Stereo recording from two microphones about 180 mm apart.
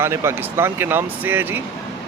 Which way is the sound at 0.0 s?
15° right (ahead or behind).